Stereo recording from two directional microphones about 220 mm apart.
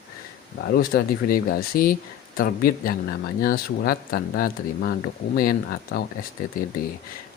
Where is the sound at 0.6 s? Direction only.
45° left (ahead or behind).